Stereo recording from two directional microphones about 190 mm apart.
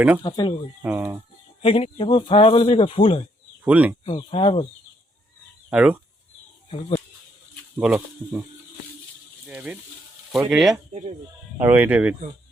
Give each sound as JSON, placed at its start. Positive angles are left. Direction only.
{"t": 0.2, "sound": "speech", "side_deg": 25}
{"t": 0.8, "sound": "speech", "side_deg": -10}
{"t": 1.6, "sound": "speech", "side_deg": 30}
{"t": 3.6, "sound": "speech", "side_deg": -5}
{"t": 4.0, "sound": "speech", "side_deg": 30}
{"t": 5.7, "sound": "speech", "side_deg": -10}
{"t": 6.7, "sound": "speech", "side_deg": 25}
{"t": 7.8, "sound": "speech", "side_deg": -5}
{"t": 9.5, "sound": "speech", "side_deg": -5}